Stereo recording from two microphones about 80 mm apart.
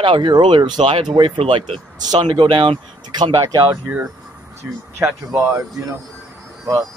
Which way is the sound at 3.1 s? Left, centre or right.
Right.